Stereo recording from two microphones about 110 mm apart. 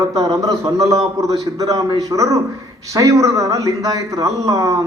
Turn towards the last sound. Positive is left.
turn(degrees=-30)  # may be behind; listen again after turning